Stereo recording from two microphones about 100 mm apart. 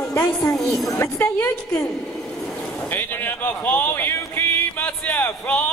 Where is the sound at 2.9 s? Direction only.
20° left (ahead or behind).